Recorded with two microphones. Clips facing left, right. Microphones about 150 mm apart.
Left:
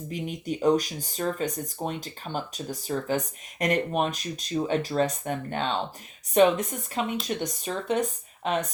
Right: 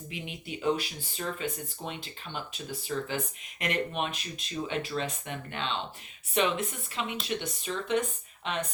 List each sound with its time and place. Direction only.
0.1 s speech: 40° left (ahead or behind)